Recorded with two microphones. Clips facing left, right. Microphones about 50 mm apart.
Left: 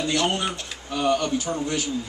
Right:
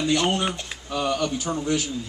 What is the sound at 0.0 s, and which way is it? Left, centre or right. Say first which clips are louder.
Speech: right 1 dB; centre.